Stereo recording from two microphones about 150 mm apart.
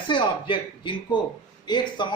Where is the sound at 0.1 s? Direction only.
35° left (ahead or behind).